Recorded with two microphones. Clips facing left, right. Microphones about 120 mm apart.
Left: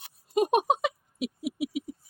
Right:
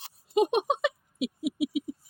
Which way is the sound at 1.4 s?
40° left (ahead or behind).